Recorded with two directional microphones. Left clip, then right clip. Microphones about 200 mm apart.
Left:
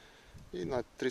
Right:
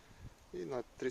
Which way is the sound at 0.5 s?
30° left (ahead or behind).